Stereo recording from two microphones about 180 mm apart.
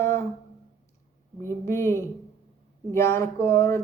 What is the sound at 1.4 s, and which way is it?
Speech, 15° left (ahead or behind).